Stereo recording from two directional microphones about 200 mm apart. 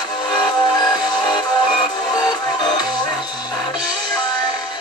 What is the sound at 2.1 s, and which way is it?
Music, 20° left (ahead or behind).